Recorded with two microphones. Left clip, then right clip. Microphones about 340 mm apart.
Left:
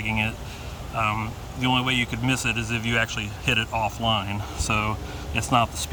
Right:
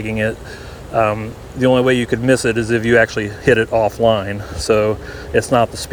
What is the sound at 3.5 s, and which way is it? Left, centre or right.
Speech, right.